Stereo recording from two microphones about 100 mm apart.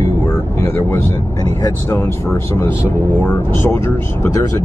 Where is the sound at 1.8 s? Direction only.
25° left (ahead or behind).